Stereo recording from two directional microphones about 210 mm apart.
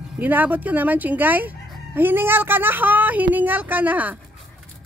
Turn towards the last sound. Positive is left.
turn(degrees=-5)  # may be behind; listen again after turning